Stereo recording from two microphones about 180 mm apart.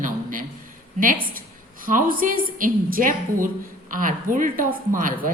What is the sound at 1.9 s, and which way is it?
A woman's voice, 50° right (ahead or behind).